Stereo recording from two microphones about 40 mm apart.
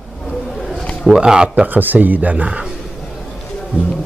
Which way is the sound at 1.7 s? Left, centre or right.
Right.